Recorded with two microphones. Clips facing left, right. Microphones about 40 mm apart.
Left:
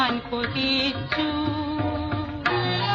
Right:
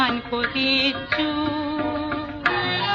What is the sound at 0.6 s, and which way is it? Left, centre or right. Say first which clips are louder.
Music: right 3 dB; right.